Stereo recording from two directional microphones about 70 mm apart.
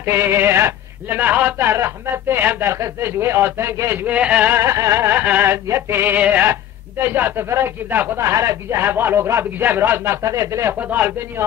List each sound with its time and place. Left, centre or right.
0.0 s a man's voice: right
1.7 s a man's voice: right
4.0 s speech: centre
4.6 s a man's voice: right
5.1 s speech: right
5.5 s a man's voice: right
6.1 s speech: right
6.4 s speech: right
7.4 s a man's voice: right
10.2 s speech: right
10.7 s speech: right